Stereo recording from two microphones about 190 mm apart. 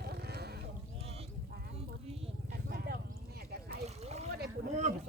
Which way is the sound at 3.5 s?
55° right (ahead or behind).